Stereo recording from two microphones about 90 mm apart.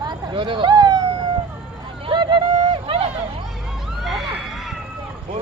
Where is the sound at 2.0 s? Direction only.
55° right (ahead or behind); by 3.1 s 80° right.